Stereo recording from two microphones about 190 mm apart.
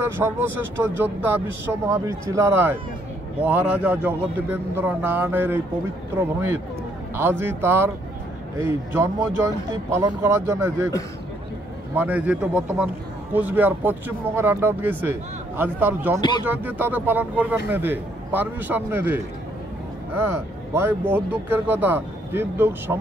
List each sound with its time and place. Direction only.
0.0 s a man's voice: 10° right (ahead or behind)
11.9 s a man's voice: 10° right (ahead or behind)
16.2 s speech: 25° left (ahead or behind)
16.4 s a man's voice: 10° right (ahead or behind)
20.7 s a man's voice: 10° right (ahead or behind)